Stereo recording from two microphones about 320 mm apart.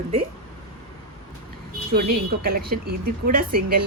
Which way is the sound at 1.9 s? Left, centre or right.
Right.